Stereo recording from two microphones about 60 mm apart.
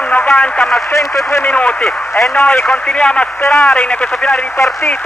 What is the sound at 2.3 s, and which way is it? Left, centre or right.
Speech, left.